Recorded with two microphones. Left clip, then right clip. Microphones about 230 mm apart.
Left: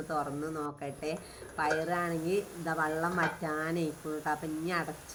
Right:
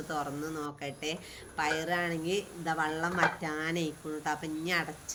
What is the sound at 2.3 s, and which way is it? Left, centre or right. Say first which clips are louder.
A woman's voice: even; centre.